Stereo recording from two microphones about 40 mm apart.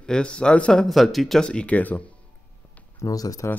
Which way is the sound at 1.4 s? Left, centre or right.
Left.